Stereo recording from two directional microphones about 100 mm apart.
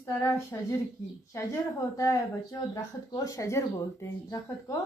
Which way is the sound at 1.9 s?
35° left (ahead or behind).